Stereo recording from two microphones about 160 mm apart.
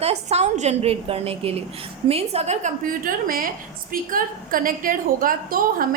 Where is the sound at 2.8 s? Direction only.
60° right (ahead or behind).